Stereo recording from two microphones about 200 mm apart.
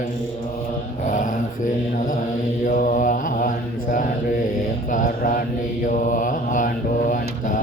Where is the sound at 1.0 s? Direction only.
40° left (ahead or behind).